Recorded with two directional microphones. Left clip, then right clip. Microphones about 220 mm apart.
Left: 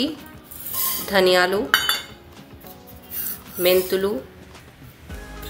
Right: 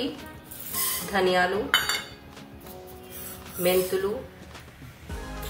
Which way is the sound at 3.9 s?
50° left (ahead or behind).